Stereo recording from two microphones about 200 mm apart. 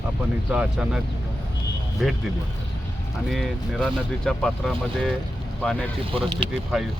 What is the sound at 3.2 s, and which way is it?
Speech, centre (ahead or behind).